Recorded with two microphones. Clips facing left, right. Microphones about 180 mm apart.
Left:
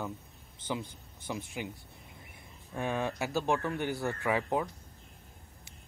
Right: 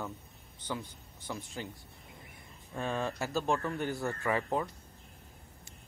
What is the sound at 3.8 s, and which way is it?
Speech, centre (ahead or behind).